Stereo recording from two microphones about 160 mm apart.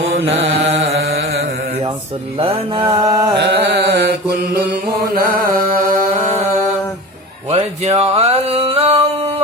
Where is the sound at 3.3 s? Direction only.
90° right; by 6.0 s 60° right (ahead or behind).